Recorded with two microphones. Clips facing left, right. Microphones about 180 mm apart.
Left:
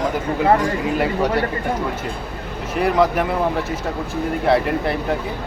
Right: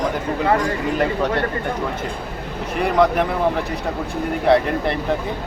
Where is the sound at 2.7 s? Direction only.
Centre (ahead or behind).